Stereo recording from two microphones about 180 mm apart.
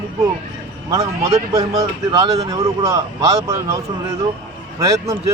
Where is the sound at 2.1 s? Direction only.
20° right (ahead or behind).